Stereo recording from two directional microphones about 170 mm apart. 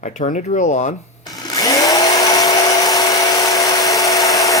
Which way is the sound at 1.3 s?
20° left (ahead or behind).